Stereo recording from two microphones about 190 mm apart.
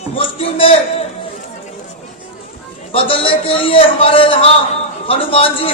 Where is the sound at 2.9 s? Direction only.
30° left (ahead or behind).